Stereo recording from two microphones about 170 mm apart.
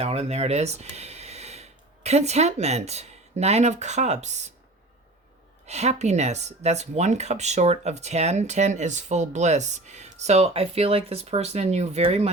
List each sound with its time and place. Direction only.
0.0 s speech: 40° right (ahead or behind)
5.6 s speech: 40° right (ahead or behind)